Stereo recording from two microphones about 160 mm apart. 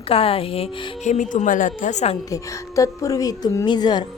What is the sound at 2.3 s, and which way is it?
A woman's voice, 20° left (ahead or behind).